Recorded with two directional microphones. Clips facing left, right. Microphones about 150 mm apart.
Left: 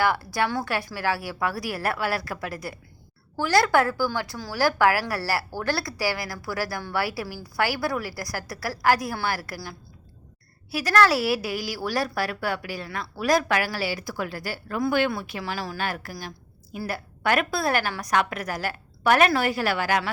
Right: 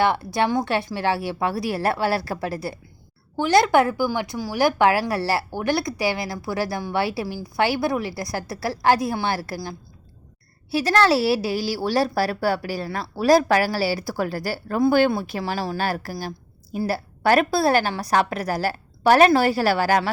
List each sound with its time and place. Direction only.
0.0 s a woman's voice: 25° right (ahead or behind)